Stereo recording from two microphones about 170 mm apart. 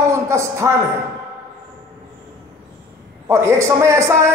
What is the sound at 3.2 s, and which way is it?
A man's voice, 15° right (ahead or behind).